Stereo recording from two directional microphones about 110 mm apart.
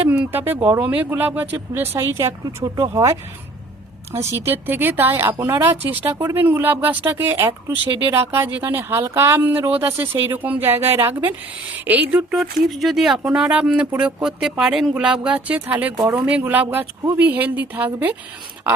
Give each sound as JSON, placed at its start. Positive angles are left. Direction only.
{"t": 0.1, "sound": "speech", "side_deg": -20}
{"t": 4.3, "sound": "speech", "side_deg": -20}
{"t": 12.4, "sound": "speech", "side_deg": 0}